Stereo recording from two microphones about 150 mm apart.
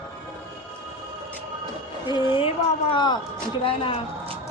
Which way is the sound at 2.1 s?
30° left (ahead or behind).